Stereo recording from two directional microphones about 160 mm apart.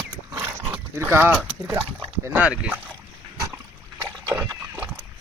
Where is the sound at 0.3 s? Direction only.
15° right (ahead or behind).